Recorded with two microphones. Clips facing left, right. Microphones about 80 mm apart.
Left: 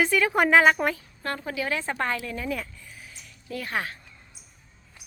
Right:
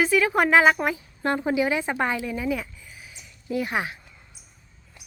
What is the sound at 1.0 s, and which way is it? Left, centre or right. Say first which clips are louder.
A woman's voice: right 7 dB; right.